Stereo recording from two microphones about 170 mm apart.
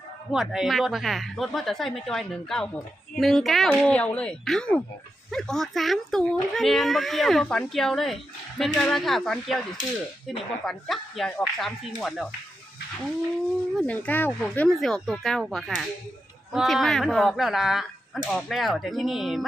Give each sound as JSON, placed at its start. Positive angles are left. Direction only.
{"t": 0.3, "sound": "a child's voice", "side_deg": 0}
{"t": 13.7, "sound": "a child's voice", "side_deg": 10}